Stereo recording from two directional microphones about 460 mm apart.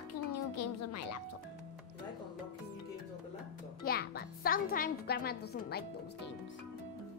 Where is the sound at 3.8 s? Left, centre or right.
Centre.